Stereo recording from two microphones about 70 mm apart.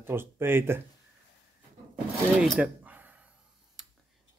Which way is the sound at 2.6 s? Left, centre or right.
Right.